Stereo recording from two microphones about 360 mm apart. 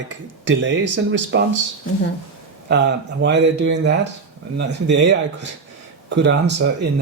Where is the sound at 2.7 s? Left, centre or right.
Right.